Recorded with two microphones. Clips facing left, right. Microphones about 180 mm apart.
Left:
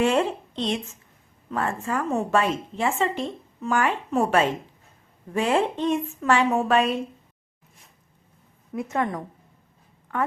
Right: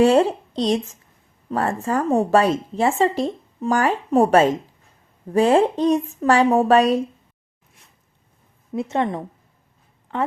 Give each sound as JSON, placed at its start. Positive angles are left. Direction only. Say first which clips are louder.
{"t": 0.0, "sound": "a woman's voice", "louder": "right 6 dB", "side_deg": -35}
{"t": 8.7, "sound": "a woman's voice", "louder": "right 4 dB", "side_deg": -25}